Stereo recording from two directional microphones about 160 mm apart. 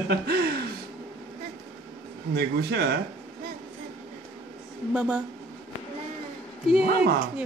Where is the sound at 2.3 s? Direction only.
80° right.